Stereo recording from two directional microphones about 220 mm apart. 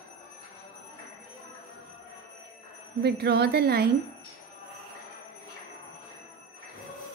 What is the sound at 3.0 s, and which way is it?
Speech, 50° right (ahead or behind).